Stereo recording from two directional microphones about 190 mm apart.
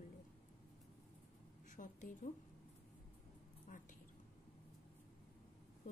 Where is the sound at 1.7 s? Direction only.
45° left (ahead or behind).